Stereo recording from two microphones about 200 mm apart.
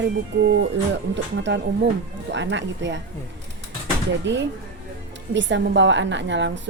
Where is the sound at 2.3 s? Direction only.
65° right (ahead or behind).